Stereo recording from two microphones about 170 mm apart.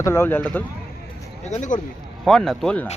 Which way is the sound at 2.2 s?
Centre (ahead or behind).